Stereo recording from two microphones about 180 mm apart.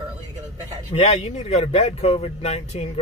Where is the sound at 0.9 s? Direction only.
35° left (ahead or behind).